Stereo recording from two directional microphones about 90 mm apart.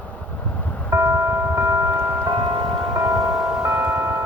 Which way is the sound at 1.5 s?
30° right (ahead or behind).